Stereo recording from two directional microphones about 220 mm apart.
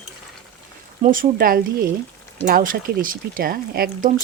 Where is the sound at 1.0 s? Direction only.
40° right (ahead or behind).